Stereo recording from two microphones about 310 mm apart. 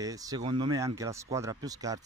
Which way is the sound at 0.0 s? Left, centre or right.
Centre.